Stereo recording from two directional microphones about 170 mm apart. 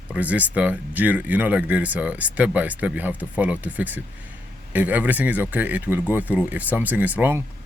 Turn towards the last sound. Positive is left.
turn(degrees=-10)  # may be behind; listen again after turning